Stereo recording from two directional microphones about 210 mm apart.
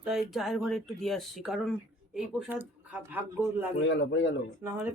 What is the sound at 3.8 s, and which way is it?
Speech, 60° left (ahead or behind).